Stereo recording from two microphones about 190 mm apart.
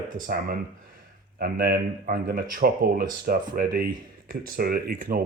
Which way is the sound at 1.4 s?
50° right (ahead or behind).